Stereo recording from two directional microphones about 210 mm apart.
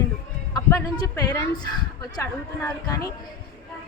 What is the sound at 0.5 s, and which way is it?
A woman's voice, 15° left (ahead or behind).